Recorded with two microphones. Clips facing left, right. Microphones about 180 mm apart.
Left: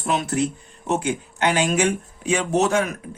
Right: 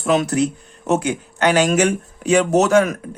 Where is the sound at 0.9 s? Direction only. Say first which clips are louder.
Right 4 dB; 70° right (ahead or behind).